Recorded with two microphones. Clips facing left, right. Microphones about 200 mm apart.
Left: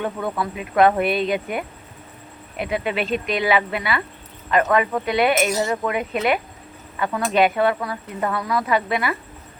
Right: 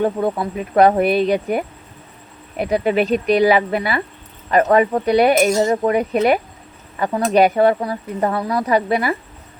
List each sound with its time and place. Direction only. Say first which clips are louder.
0.0 s speech: right 6 dB; 30° right (ahead or behind)
0.5 s speech: right 3 dB; 40° right (ahead or behind)
2.6 s speech: right 7 dB; 40° right (ahead or behind)